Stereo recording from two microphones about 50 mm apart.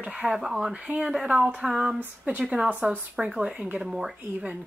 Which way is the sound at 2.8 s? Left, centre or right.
Right.